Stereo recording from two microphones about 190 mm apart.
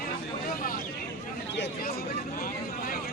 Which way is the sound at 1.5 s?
55° left (ahead or behind).